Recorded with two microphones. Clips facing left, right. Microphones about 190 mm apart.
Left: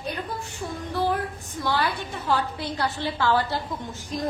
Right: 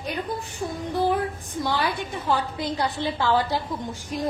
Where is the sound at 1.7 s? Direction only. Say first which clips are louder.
Left 1 dB; 15° right (ahead or behind).